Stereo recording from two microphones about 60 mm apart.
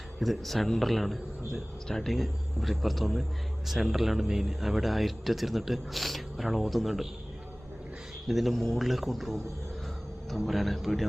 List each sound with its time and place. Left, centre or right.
0.2 s speech: centre
8.3 s speech: centre